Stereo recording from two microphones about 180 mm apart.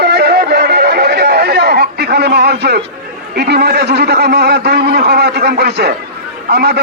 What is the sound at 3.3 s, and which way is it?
A man's voice, 65° right (ahead or behind).